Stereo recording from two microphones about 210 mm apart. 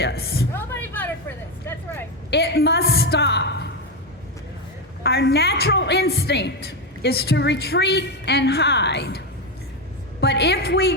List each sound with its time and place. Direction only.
0.0 s a woman's voice: 50° left (ahead or behind)
0.5 s a sound: 10° left (ahead or behind)
2.3 s a woman's voice: 50° left (ahead or behind)
5.0 s a woman's voice: 50° left (ahead or behind)